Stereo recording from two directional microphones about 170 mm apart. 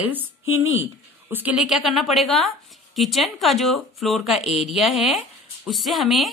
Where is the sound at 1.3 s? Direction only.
10° right (ahead or behind).